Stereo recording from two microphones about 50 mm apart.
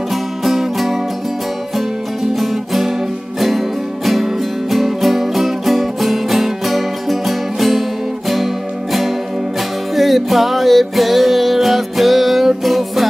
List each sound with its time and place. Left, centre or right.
0.1 s music: centre
2.3 s music: centre
9.9 s music: centre